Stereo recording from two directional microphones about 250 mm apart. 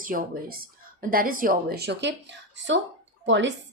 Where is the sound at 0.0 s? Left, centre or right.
Right.